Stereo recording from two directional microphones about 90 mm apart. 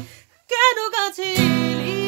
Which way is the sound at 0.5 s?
30° right (ahead or behind).